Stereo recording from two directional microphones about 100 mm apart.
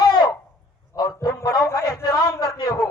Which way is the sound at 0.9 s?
40° left (ahead or behind).